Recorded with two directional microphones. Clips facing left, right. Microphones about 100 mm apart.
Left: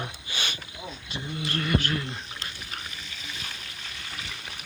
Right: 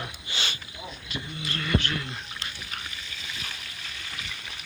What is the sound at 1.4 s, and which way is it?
Speech, 45° left (ahead or behind).